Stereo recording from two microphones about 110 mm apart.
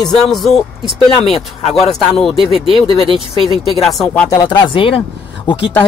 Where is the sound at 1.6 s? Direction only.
65° left (ahead or behind).